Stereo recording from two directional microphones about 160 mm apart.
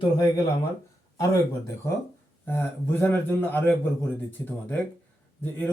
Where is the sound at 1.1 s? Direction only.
20° left (ahead or behind).